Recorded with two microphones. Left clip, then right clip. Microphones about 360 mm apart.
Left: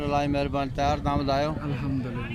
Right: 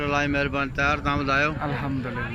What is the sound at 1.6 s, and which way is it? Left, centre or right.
Speech, centre.